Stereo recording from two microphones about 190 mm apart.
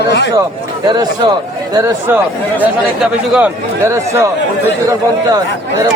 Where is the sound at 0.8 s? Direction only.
20° right (ahead or behind).